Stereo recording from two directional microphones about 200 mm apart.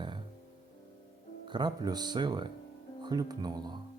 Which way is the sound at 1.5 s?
20° right (ahead or behind).